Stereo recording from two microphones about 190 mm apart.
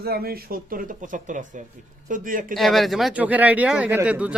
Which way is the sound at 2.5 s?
Centre (ahead or behind).